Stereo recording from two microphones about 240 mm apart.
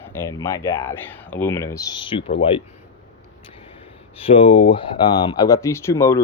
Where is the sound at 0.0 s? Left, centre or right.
Centre.